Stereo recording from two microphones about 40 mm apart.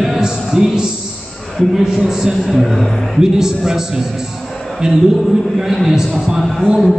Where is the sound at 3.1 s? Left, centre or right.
Centre.